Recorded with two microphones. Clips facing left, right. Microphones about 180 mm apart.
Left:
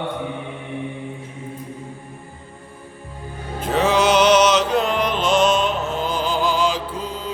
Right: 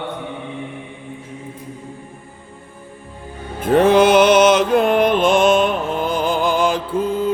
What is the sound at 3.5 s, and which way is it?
Music, 55° right (ahead or behind).